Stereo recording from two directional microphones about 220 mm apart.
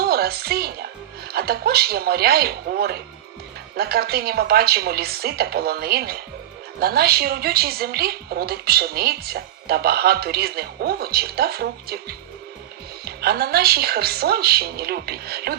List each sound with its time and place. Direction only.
0.0 s a woman's voice: 45° right (ahead or behind)